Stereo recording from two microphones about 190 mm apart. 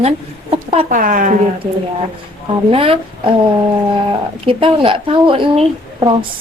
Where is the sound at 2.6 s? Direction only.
30° right (ahead or behind).